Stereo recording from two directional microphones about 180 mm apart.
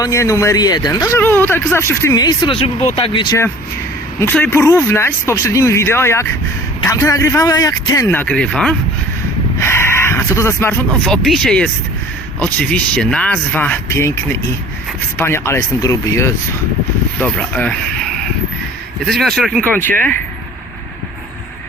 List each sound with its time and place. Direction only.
0.0 s speech: 20° left (ahead or behind)
4.2 s speech: 10° left (ahead or behind)
15.2 s speech: 15° left (ahead or behind)
19.0 s speech: centre (ahead or behind)